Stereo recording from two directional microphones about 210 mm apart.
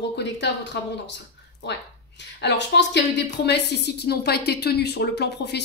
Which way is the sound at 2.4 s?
55° left (ahead or behind).